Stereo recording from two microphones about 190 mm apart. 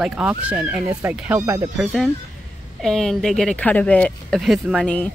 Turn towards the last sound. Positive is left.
turn(degrees=5)  # may be behind; listen again after turning